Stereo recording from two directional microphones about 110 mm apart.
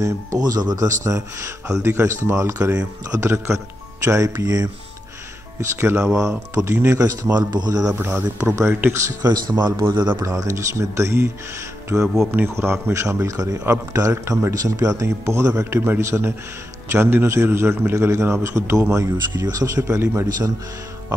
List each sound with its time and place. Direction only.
0.0 s speech: 30° right (ahead or behind)
5.8 s speech: 25° right (ahead or behind)
7.3 s speech: 40° right (ahead or behind)
8.0 s speech: 15° right (ahead or behind)
8.5 s speech: 25° right (ahead or behind)
9.2 s speech: 40° right (ahead or behind)
10.2 s speech: 30° right (ahead or behind)
11.9 s speech: 5° right (ahead or behind)
12.3 s speech: 20° right (ahead or behind)